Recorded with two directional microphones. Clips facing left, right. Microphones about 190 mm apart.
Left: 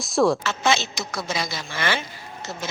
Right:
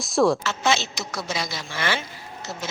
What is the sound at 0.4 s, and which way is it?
Speech, 55° left (ahead or behind).